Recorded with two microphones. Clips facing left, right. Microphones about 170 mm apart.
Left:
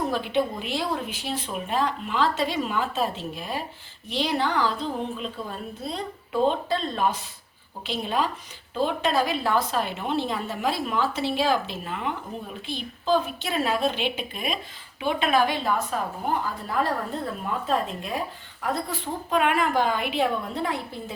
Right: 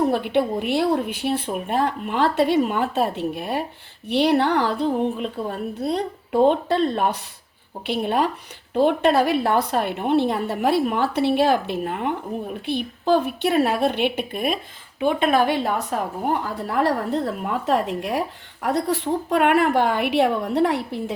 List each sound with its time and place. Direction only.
0.1 s a woman's voice: 60° right (ahead or behind)